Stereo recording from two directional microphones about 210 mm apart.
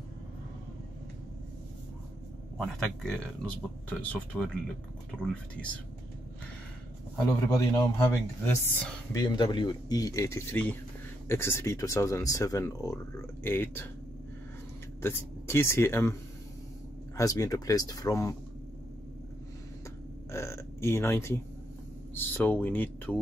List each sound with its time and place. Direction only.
2.5 s speech: centre (ahead or behind)
7.5 s speech: 15° left (ahead or behind)
15.0 s speech: 10° left (ahead or behind)
17.2 s speech: 15° left (ahead or behind)
20.2 s a sound: 15° left (ahead or behind)
22.1 s speech: 10° left (ahead or behind)